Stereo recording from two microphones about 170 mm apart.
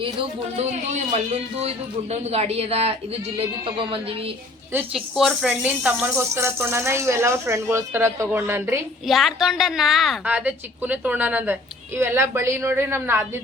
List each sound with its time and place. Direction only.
0.0 s a man's voice: 35° right (ahead or behind)
4.7 s speech: 10° right (ahead or behind)
9.0 s a woman's voice: centre (ahead or behind)